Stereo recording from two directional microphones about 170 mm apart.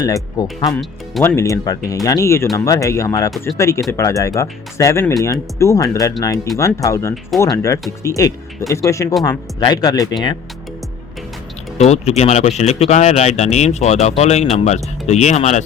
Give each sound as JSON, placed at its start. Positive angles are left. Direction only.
{"t": 0.0, "sound": "speech", "side_deg": 20}
{"t": 11.8, "sound": "speech", "side_deg": 40}